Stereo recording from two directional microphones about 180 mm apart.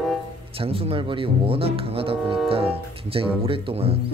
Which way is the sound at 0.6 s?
30° right (ahead or behind).